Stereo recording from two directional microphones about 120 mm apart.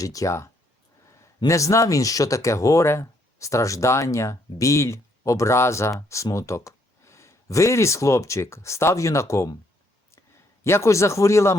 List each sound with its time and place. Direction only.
0.0 s speech: 30° left (ahead or behind)
10.6 s speech: 20° left (ahead or behind)